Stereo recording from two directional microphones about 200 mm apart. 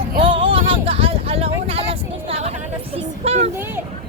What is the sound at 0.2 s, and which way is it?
Music, 25° right (ahead or behind).